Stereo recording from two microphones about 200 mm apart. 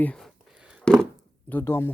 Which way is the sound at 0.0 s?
5° left (ahead or behind).